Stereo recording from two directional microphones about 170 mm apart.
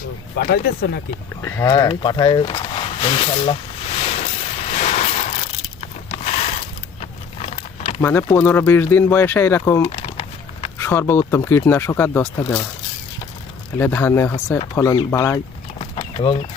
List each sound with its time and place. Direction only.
0.3 s speech: 65° left (ahead or behind)
1.4 s vehicle: 15° left (ahead or behind); by 6.6 s 40° left (ahead or behind)
7.0 s a sound: 40° left (ahead or behind)
8.0 s speech: 15° left (ahead or behind)
9.9 s horse: 35° left (ahead or behind)
10.8 s speech: 15° left (ahead or behind)
13.7 s speech: 10° left (ahead or behind)
15.8 s a sound: 30° left (ahead or behind)